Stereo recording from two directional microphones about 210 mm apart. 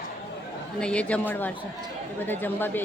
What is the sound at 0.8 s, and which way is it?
Speech, 5° left (ahead or behind).